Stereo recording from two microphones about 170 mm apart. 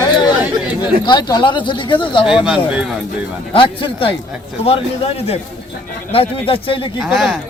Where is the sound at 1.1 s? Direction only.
25° left (ahead or behind).